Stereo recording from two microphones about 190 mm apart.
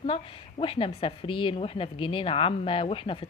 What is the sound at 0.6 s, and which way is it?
A woman's voice, 30° left (ahead or behind).